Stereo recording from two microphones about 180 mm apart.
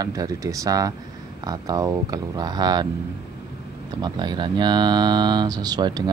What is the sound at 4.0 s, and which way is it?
Speech, 25° right (ahead or behind).